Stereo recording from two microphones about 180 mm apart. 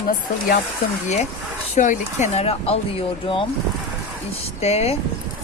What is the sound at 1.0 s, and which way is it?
Speech, 40° left (ahead or behind).